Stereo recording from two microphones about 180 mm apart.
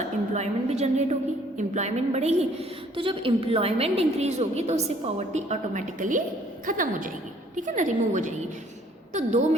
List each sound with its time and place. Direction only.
0.0 s a woman's voice: 35° right (ahead or behind)